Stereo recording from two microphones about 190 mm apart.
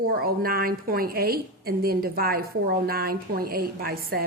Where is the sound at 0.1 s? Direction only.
50° right (ahead or behind).